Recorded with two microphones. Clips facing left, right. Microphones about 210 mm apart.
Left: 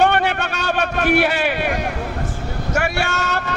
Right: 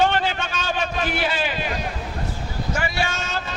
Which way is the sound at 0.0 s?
65° left (ahead or behind).